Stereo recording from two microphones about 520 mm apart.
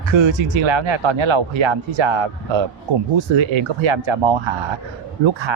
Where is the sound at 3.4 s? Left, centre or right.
Right.